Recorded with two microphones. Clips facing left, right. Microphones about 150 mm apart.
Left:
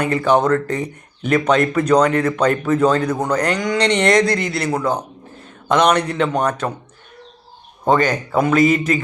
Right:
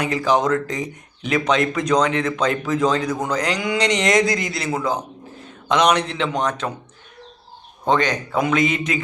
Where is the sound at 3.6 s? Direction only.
10° right (ahead or behind).